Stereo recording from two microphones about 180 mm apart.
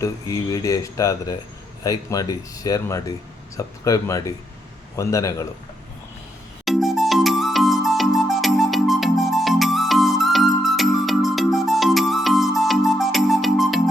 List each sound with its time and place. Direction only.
0.0 s speech: 20° left (ahead or behind)
6.7 s music: centre (ahead or behind)